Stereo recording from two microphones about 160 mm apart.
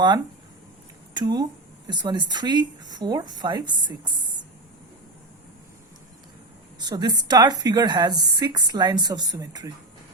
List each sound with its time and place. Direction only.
1.1 s a woman's voice: 25° right (ahead or behind)
6.7 s a woman's voice: 25° right (ahead or behind)